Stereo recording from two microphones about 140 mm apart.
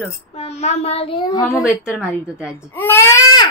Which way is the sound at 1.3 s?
25° left (ahead or behind).